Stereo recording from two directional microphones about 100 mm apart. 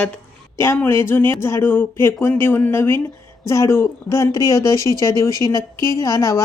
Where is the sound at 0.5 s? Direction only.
25° left (ahead or behind).